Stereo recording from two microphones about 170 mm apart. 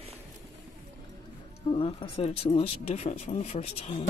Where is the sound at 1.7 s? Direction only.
35° left (ahead or behind).